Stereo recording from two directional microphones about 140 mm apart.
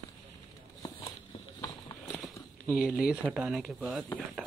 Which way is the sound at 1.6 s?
30° left (ahead or behind).